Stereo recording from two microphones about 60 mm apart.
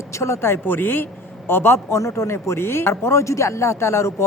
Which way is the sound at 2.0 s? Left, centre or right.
Left.